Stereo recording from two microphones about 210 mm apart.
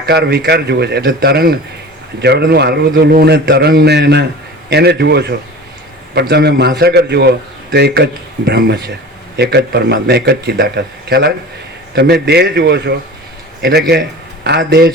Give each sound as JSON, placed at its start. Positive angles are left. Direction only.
{"t": 0.0, "sound": "a man's voice", "side_deg": -50}